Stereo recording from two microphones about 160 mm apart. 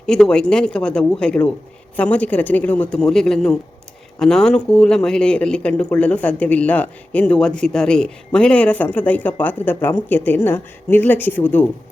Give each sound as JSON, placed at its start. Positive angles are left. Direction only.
{"t": 0.0, "sound": "speech", "side_deg": 5}